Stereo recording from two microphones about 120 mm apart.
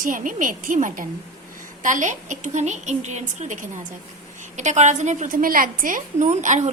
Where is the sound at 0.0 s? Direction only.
90° right.